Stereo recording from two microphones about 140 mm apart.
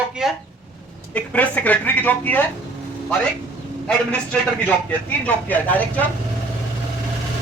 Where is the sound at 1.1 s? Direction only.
10° left (ahead or behind).